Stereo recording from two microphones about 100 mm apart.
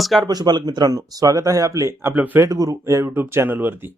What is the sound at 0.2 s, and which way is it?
Speech, 40° right (ahead or behind).